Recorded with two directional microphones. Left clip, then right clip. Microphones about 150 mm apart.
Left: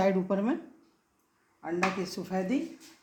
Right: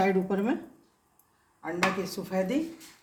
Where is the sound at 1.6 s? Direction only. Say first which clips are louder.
Right 2 dB; 85° left.